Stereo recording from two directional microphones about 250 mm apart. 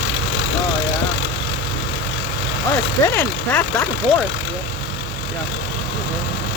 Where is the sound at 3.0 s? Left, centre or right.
Centre.